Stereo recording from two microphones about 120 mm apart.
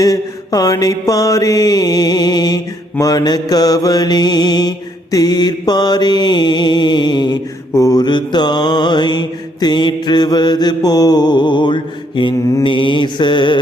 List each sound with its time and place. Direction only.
0.0 s mantra: 30° left (ahead or behind)